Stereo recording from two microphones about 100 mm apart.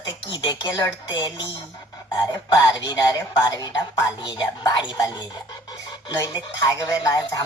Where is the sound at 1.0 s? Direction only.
50° left (ahead or behind).